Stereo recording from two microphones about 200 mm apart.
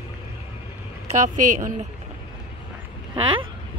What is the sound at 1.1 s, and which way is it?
Speech, 40° right (ahead or behind).